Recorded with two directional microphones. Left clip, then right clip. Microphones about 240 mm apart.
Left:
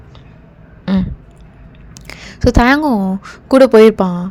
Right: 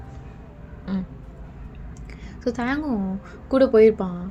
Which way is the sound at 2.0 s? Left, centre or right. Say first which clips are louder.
Left 13 dB; left.